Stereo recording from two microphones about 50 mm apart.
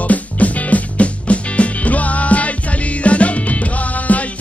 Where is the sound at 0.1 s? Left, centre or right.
Left.